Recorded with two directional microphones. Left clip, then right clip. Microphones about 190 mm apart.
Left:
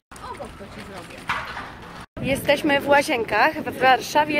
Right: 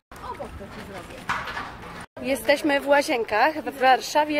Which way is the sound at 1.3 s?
40° right (ahead or behind).